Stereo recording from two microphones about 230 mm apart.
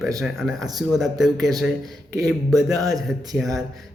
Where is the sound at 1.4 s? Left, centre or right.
Centre.